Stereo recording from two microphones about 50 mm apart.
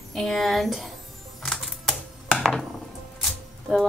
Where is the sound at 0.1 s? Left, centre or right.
Centre.